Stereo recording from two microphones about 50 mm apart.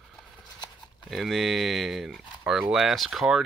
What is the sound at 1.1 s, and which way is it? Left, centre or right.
Speech, centre.